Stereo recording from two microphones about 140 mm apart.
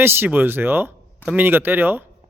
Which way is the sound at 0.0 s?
15° right (ahead or behind).